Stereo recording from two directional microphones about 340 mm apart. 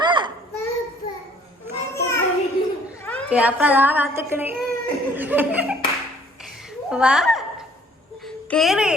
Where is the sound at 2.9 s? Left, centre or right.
Centre.